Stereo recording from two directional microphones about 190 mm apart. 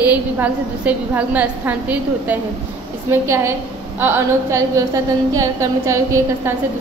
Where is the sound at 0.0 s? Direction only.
10° right (ahead or behind).